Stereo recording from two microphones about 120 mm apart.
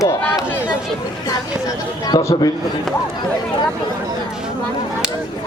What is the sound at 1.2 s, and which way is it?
Speech, 30° left (ahead or behind).